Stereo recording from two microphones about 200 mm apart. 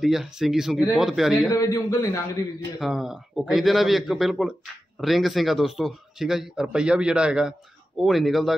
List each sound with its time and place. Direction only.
0.0 s speech: centre (ahead or behind)
1.5 s a man's voice: 15° left (ahead or behind)
2.8 s speech: centre (ahead or behind)